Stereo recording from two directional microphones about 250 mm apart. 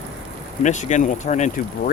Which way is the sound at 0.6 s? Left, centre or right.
Left.